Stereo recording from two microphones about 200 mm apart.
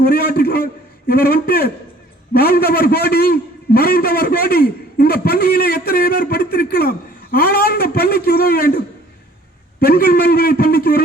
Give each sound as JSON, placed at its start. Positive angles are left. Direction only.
{"t": 0.0, "sound": "a man's voice", "side_deg": 50}
{"t": 9.8, "sound": "a man's voice", "side_deg": 50}